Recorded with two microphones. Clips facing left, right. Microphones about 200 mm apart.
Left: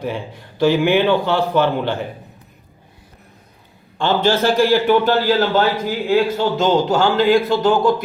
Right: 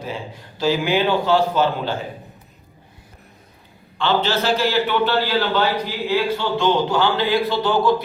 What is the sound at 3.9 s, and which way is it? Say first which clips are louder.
A man's voice: left 3 dB; 50° left (ahead or behind).